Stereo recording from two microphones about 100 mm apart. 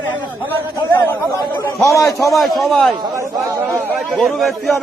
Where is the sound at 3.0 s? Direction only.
30° right (ahead or behind).